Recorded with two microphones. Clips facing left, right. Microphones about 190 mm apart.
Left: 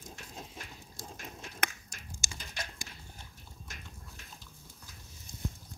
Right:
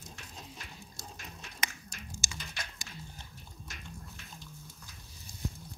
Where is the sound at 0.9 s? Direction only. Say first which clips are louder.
Left 6 dB; 50° left (ahead or behind).